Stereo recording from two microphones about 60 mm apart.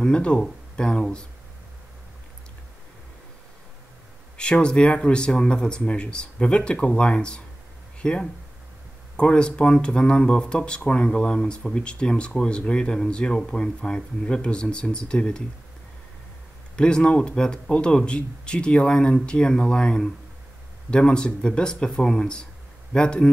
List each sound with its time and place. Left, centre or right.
0.0 s speech: centre
4.4 s speech: centre
16.7 s speech: centre